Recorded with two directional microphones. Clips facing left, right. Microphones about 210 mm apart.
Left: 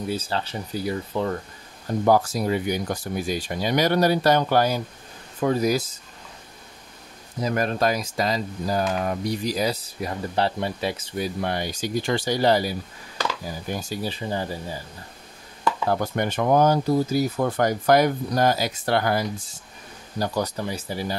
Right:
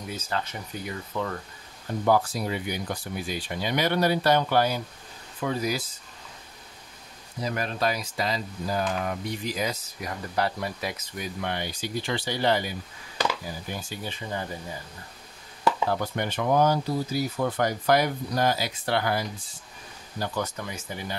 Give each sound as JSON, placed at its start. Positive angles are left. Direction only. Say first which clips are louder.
{"t": 0.1, "sound": "speech", "louder": "left 1 dB", "side_deg": 30}
{"t": 7.4, "sound": "speech", "louder": "left 5 dB", "side_deg": 45}
{"t": 13.7, "sound": "speech", "louder": "left 6 dB", "side_deg": 35}
{"t": 15.9, "sound": "speech", "louder": "left 4 dB", "side_deg": 45}